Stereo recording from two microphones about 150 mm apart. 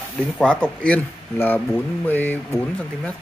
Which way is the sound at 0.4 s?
10° left (ahead or behind).